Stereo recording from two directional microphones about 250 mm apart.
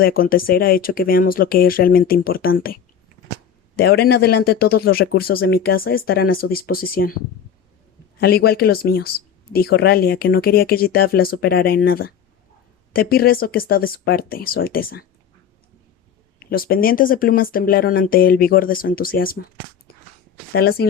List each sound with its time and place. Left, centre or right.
0.0 s speech: left
8.2 s speech: left
16.4 s speech: left
20.5 s speech: left